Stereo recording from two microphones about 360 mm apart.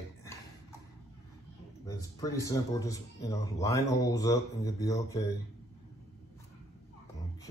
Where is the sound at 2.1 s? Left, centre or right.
Centre.